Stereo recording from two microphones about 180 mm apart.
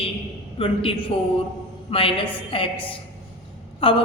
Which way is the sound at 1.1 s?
30° left (ahead or behind).